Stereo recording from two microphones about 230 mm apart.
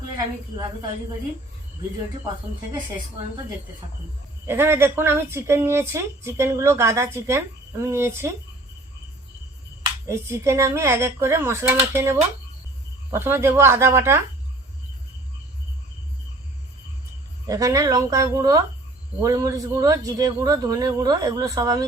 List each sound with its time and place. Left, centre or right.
4.4 s speech: centre
10.1 s speech: centre
17.4 s speech: centre